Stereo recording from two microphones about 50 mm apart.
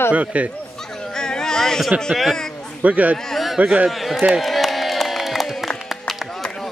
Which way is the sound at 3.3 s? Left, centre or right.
Centre.